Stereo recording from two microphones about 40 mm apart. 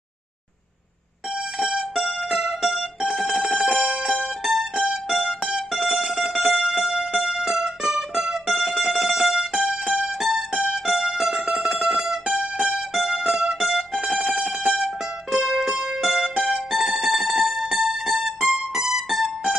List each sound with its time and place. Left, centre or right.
1.8 s music: centre
3.3 s telephone bell ringing: centre
4.4 s music: centre
15.3 s music: centre